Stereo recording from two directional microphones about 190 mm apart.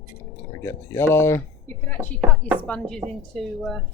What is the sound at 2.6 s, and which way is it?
Speech, 5° left (ahead or behind).